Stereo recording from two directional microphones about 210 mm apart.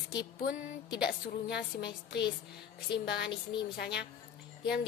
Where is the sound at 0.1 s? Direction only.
55° left (ahead or behind).